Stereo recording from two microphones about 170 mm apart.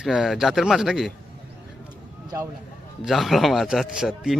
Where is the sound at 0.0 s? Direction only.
Centre (ahead or behind).